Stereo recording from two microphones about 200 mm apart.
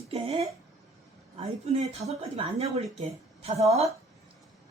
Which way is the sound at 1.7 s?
30° right (ahead or behind).